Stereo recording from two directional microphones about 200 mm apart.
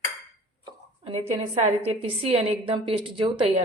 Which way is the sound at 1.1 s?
30° right (ahead or behind).